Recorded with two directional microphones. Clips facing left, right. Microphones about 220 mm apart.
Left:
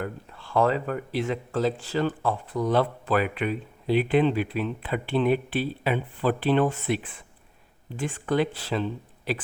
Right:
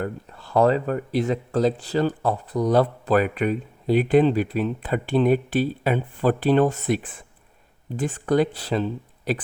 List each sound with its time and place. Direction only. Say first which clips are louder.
0.0 s speech: right 4 dB; 40° right (ahead or behind)